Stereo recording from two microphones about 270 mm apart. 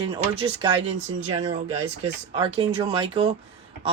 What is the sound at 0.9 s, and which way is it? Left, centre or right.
Speech, centre.